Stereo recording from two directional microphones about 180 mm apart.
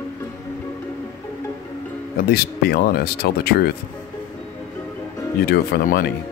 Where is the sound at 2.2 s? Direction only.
60° left (ahead or behind).